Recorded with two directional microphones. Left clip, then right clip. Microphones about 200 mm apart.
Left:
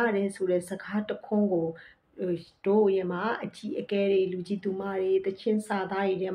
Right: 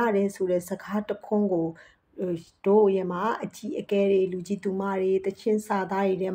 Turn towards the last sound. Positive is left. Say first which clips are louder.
# right 3 dB
turn(degrees=-45)  # may be behind; listen again after turning